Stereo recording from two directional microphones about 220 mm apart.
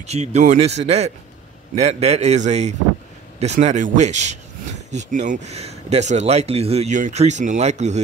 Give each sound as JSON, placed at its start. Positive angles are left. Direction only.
{"t": 0.0, "sound": "speech", "side_deg": -30}